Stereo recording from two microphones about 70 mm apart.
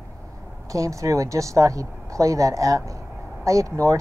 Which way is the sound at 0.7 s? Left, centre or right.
Right.